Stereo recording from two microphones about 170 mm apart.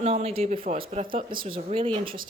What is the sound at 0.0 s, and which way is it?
Speech, 40° right (ahead or behind).